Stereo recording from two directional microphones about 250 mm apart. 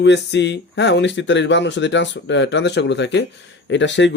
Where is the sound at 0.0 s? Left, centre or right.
Left.